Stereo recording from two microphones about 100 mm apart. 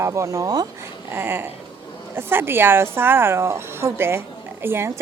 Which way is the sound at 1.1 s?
20° right (ahead or behind).